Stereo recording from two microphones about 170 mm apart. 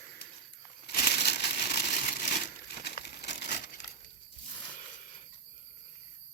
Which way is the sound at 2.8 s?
70° left (ahead or behind).